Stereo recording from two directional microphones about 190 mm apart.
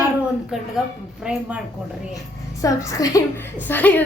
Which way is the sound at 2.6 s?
15° left (ahead or behind).